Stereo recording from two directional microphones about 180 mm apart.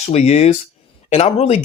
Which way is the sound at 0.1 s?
40° left (ahead or behind).